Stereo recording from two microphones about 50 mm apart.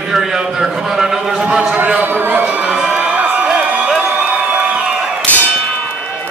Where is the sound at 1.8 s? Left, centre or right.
Right.